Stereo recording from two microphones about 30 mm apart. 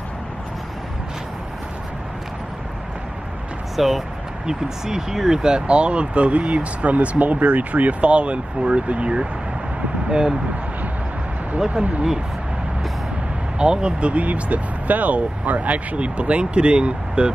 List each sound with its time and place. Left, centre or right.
3.7 s speech: centre
4.5 s speech: centre; by 9.1 s right
10.0 s speech: right
11.7 s speech: right
13.6 s speech: right